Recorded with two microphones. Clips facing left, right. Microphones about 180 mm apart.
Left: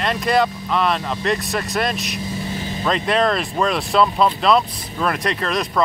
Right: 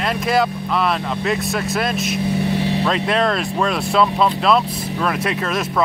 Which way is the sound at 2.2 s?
65° right (ahead or behind).